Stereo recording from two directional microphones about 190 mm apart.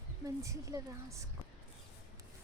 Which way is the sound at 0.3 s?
15° right (ahead or behind).